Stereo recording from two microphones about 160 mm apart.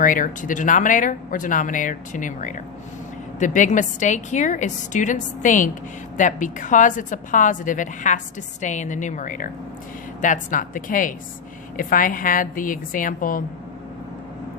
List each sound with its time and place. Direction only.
0.0 s a woman's voice: 55° left (ahead or behind)